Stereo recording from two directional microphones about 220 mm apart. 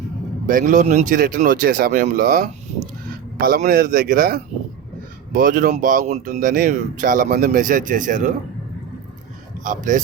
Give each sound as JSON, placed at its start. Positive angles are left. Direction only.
{"t": 0.4, "sound": "speech", "side_deg": -35}
{"t": 9.6, "sound": "speech", "side_deg": -35}